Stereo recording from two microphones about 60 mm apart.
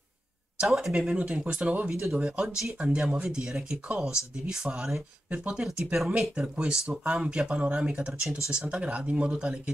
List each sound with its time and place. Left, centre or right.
0.6 s speech: centre
2.1 s speech: centre